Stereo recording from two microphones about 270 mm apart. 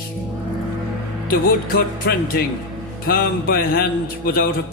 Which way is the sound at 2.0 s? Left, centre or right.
Left.